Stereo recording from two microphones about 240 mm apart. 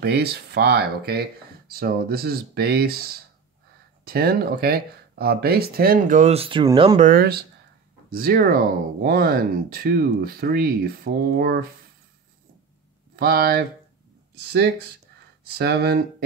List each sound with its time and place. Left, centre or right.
0.0 s speech: right; by 7.0 s centre
7.0 s speech: right
13.1 s speech: right